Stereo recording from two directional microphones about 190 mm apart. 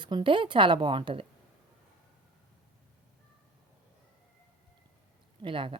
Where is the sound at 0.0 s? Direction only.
25° right (ahead or behind).